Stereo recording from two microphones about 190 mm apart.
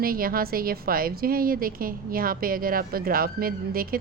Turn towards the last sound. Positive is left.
turn(degrees=-50)  # may be behind; listen again after turning